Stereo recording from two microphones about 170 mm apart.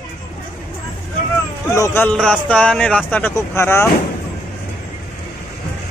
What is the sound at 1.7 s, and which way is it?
Speech, 15° left (ahead or behind).